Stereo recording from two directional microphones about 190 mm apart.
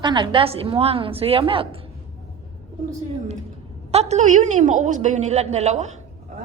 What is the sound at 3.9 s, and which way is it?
A woman's voice, 35° right (ahead or behind).